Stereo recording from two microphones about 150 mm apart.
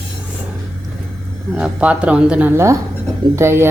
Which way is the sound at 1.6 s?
10° right (ahead or behind).